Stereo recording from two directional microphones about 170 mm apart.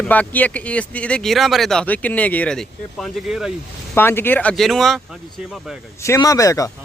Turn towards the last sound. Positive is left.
turn(degrees=20)  # may be behind; listen again after turning